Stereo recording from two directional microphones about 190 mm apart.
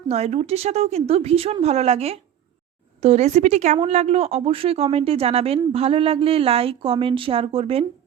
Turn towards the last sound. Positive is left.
turn(degrees=-30)  # may be behind; listen again after turning